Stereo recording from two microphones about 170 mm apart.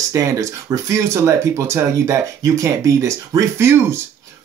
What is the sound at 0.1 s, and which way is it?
Speech, 20° right (ahead or behind).